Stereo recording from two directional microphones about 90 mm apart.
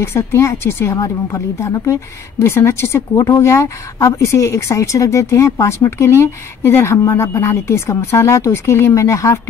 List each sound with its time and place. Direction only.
0.0 s a woman's voice: 30° left (ahead or behind)